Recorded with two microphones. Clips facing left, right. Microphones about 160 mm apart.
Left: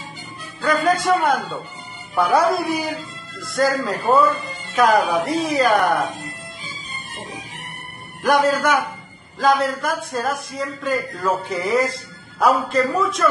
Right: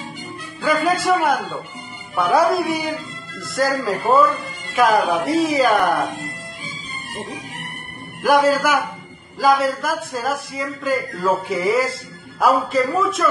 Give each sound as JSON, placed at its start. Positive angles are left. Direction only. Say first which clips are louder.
{"t": 0.6, "sound": "a man's voice", "louder": "even", "side_deg": -5}
{"t": 8.2, "sound": "a man's voice", "louder": "right 2 dB", "side_deg": -5}